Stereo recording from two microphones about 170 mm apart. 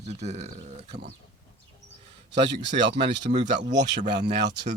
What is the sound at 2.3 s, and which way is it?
Speech, 90° right.